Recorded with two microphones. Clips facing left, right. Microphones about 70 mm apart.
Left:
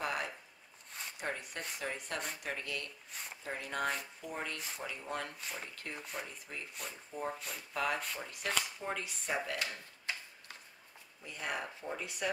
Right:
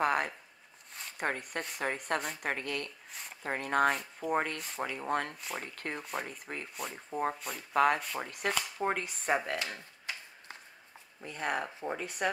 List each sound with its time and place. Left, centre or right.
0.0 s a sound: right
1.2 s speech: right
3.1 s speech: centre
3.4 s speech: right
7.3 s speech: centre
7.7 s speech: right
11.2 s speech: right